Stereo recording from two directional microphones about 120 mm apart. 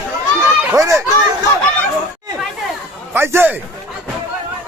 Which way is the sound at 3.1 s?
20° right (ahead or behind).